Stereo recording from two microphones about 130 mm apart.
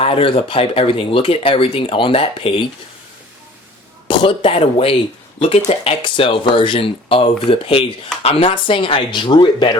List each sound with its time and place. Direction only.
0.0 s speech: 45° left (ahead or behind)
4.1 s speech: 40° left (ahead or behind)